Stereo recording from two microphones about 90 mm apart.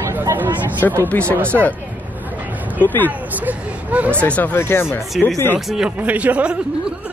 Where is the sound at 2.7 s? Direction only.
20° left (ahead or behind).